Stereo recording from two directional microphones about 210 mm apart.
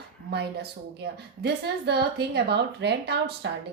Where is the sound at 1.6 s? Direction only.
50° right (ahead or behind).